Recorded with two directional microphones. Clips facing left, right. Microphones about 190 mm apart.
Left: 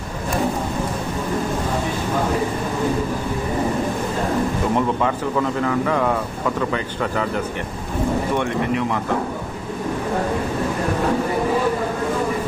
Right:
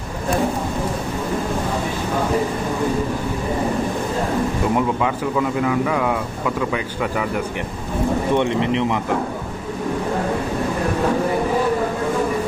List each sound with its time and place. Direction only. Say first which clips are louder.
4.7 s a man's voice: even; 10° right (ahead or behind)
8.4 s speech: right 2 dB; 20° right (ahead or behind)